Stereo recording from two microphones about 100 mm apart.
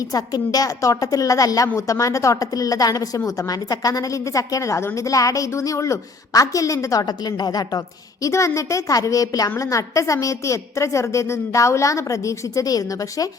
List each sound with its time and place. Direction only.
0.0 s a woman's voice: 40° left (ahead or behind)
8.2 s a woman's voice: 30° left (ahead or behind)